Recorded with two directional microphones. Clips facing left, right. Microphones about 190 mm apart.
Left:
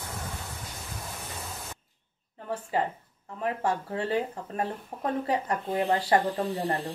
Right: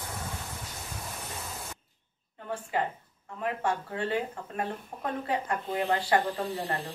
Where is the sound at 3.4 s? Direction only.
35° left (ahead or behind).